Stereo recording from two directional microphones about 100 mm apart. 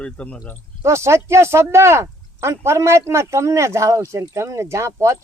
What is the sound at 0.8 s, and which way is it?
Speech, 30° right (ahead or behind).